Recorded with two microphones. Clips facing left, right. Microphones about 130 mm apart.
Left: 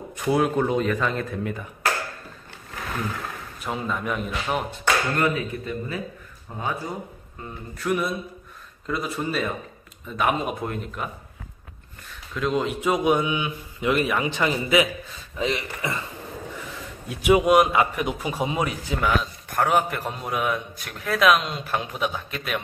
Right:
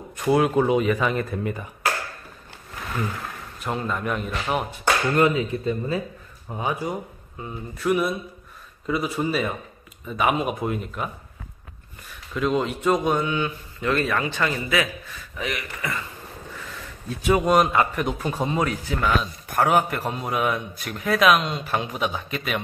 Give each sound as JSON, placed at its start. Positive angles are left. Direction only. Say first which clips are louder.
{"t": 0.1, "sound": "a man's voice", "louder": "right 2 dB", "side_deg": 0}
{"t": 3.6, "sound": "a man's voice", "louder": "right 1 dB", "side_deg": 0}
{"t": 5.1, "sound": "speech", "louder": "right 4 dB", "side_deg": -20}
{"t": 7.4, "sound": "a man's voice", "louder": "right 3 dB", "side_deg": -5}
{"t": 12.4, "sound": "a man's voice", "louder": "right 1 dB", "side_deg": 0}
{"t": 19.5, "sound": "a man's voice", "louder": "right 2 dB", "side_deg": -5}